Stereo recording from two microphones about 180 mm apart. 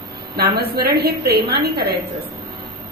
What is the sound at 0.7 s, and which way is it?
A woman's voice, 60° right (ahead or behind).